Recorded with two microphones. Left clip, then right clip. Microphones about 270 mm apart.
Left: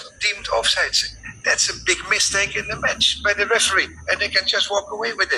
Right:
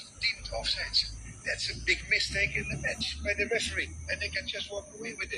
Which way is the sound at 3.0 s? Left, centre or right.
Left.